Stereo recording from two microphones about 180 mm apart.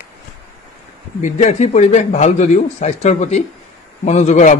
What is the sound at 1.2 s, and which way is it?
A man's voice, 40° left (ahead or behind).